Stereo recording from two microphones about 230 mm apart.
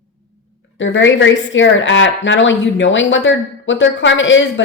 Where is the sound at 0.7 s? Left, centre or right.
Left.